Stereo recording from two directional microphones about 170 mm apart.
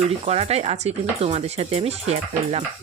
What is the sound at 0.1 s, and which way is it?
Speech, 35° right (ahead or behind).